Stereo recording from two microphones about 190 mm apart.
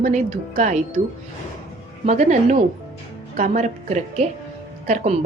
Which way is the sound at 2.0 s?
40° right (ahead or behind).